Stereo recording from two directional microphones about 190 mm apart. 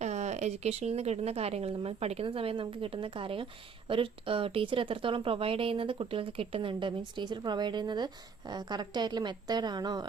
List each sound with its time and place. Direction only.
0.0 s a woman's voice: 35° right (ahead or behind)